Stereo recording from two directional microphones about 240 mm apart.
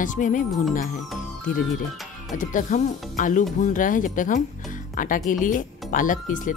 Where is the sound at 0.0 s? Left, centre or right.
Left.